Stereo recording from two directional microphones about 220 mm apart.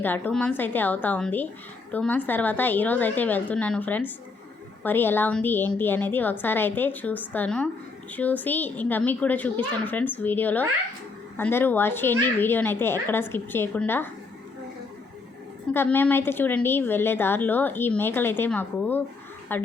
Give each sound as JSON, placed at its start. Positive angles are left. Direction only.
{"t": 0.0, "sound": "a woman's voice", "side_deg": 5}
{"t": 15.7, "sound": "a woman's voice", "side_deg": 10}